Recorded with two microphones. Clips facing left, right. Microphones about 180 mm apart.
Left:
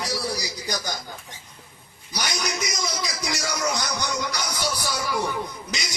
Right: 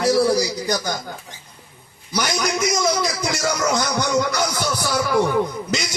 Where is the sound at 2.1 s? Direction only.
60° right (ahead or behind).